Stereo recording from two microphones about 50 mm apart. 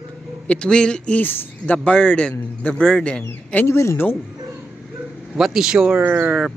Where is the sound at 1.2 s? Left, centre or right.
Left.